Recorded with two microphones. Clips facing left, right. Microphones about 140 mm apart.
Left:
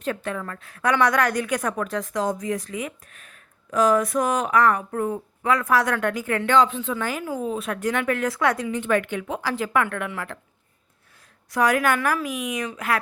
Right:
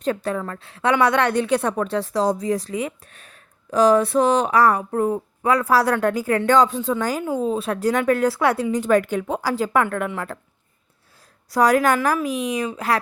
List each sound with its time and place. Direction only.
0.0 s a woman's voice: 35° right (ahead or behind)
11.5 s speech: 35° right (ahead or behind)